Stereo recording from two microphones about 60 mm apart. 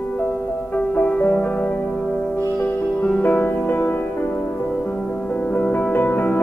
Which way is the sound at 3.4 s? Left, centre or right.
Left.